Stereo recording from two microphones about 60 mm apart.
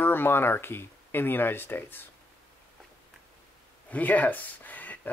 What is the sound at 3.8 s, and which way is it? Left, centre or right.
Speech, left.